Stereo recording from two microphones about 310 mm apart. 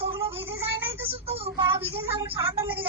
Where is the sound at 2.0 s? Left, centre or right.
Centre.